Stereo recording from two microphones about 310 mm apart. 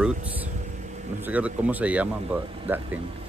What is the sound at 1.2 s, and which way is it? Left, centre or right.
Speech, centre.